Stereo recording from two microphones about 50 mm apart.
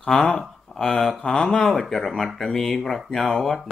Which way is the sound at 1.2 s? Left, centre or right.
Centre.